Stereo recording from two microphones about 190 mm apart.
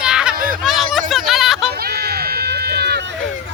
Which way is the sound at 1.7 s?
55° right (ahead or behind).